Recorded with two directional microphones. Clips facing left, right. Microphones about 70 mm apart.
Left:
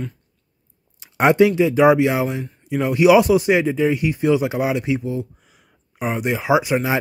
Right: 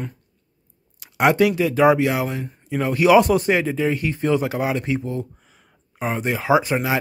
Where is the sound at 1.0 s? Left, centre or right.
Left.